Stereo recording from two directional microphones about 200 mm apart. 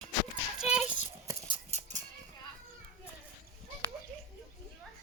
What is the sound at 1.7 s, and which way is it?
Horse, 35° right (ahead or behind).